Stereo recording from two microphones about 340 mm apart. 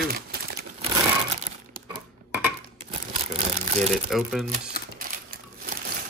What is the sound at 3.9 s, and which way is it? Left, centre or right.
Speech, centre.